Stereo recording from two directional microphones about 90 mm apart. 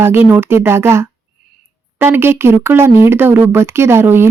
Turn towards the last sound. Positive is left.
turn(degrees=-25)  # may be behind; listen again after turning